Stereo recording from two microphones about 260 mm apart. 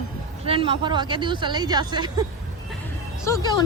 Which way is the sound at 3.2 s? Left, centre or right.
Centre.